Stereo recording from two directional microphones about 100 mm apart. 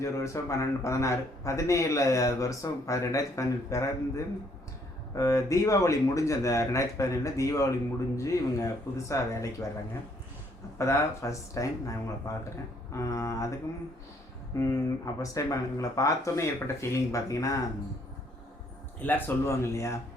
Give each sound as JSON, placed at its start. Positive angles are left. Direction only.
{"t": 0.0, "sound": "a man's voice", "side_deg": 30}
{"t": 10.8, "sound": "a man's voice", "side_deg": 30}
{"t": 14.5, "sound": "a man's voice", "side_deg": 35}
{"t": 19.0, "sound": "speech", "side_deg": 25}